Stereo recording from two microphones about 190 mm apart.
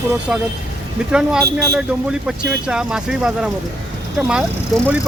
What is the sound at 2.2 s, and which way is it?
Speech, 5° right (ahead or behind).